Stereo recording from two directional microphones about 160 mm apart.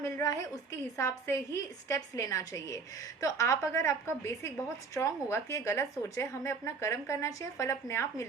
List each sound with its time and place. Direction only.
0.0 s a woman's voice: 20° left (ahead or behind)